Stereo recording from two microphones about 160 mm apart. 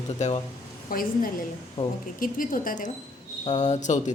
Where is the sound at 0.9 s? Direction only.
60° left (ahead or behind).